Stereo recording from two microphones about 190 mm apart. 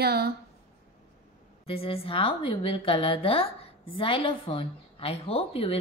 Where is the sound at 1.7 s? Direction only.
30° left (ahead or behind).